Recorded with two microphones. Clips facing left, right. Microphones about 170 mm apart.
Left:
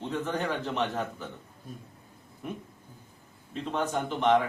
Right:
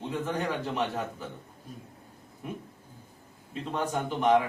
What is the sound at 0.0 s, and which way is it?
A man's voice, 10° right (ahead or behind).